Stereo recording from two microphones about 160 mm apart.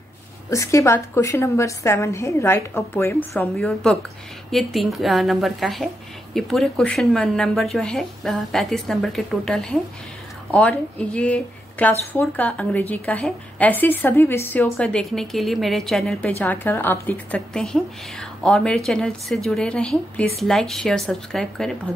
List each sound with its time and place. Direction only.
0.5 s a woman's voice: 20° left (ahead or behind); by 21.7 s centre (ahead or behind)